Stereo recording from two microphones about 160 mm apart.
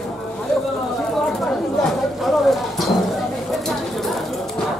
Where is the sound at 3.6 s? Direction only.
Centre (ahead or behind).